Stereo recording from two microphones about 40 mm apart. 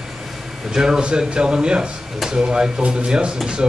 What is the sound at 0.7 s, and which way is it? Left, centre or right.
Speech, centre.